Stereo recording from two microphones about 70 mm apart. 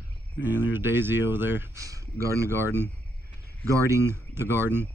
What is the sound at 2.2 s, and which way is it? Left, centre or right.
Speech, right.